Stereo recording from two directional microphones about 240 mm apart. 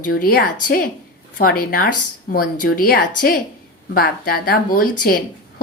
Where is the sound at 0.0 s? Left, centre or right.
Left.